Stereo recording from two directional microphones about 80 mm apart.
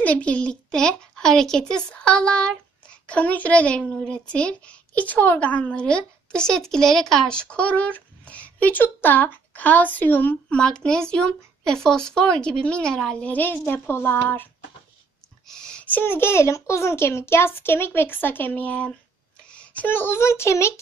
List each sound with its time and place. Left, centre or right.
0.0 s a child's voice: centre
10.6 s a child's voice: centre
13.3 s a child's voice: left
15.4 s a sound: centre
15.8 s a child's voice: left